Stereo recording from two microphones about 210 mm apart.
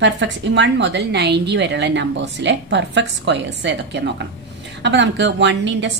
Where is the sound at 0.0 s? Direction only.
60° right (ahead or behind).